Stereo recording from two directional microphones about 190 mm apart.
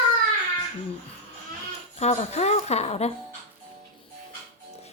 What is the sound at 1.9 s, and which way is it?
Speech, 35° left (ahead or behind).